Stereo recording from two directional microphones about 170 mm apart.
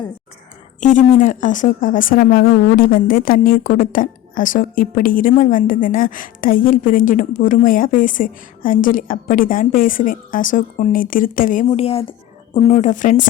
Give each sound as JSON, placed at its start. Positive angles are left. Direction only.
{"t": 0.8, "sound": "speech", "side_deg": 50}